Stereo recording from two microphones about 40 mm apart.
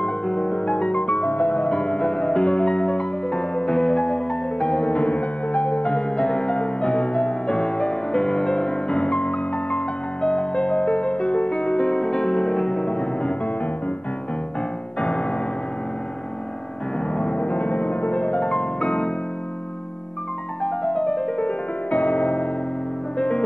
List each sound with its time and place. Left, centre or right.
0.0 s music: left
15.0 s music: left
17.2 s music: left
20.6 s music: centre
21.9 s electric piano: left
23.1 s music: left